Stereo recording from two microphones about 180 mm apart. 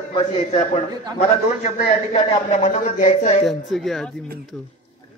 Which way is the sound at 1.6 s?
40° left (ahead or behind).